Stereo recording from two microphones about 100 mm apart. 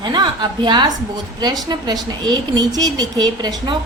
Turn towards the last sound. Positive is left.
turn(degrees=-40)  # may be behind; listen again after turning